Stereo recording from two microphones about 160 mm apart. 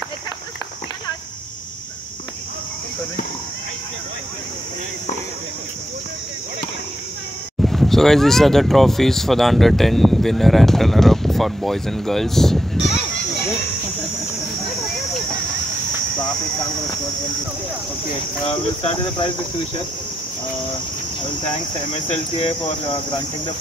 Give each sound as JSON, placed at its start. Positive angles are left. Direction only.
{"t": 7.6, "sound": "speech", "side_deg": 0}
{"t": 18.5, "sound": "speech", "side_deg": 35}
{"t": 21.9, "sound": "speech", "side_deg": 35}